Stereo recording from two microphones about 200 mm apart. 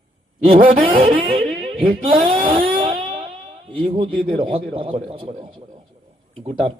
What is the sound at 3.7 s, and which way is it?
A man's voice, 25° right (ahead or behind).